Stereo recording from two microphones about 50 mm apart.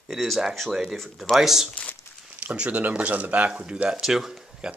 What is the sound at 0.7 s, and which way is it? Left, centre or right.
Speech, centre.